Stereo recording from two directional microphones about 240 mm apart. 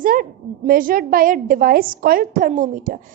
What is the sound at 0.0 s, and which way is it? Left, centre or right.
A woman's voice, right.